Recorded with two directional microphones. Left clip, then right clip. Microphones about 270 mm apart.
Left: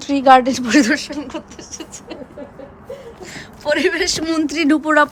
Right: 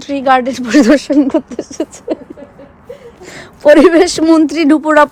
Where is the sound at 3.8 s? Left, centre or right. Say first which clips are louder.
Right 10 dB; centre.